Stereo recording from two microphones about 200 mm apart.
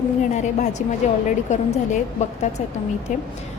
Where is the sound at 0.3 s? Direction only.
35° left (ahead or behind).